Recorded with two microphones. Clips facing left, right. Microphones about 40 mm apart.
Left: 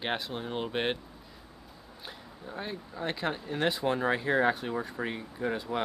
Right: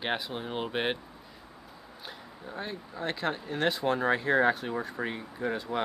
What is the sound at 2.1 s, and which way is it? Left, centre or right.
Speech, centre.